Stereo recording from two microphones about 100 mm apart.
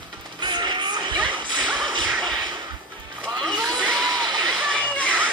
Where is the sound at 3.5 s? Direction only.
45° right (ahead or behind).